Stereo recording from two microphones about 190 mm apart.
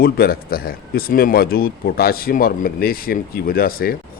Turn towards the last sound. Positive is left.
turn(degrees=50)  # may be behind; listen again after turning